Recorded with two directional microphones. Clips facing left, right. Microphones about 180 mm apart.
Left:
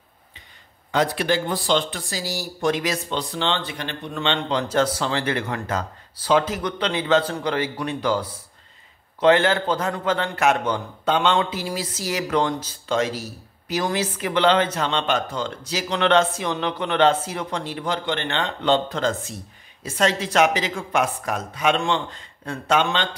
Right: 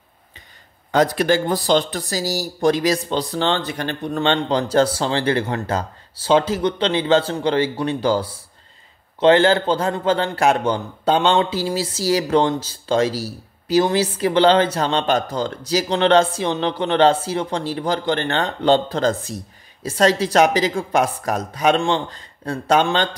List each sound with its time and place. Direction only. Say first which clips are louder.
0.9 s a man's voice: right 5 dB; 40° right (ahead or behind)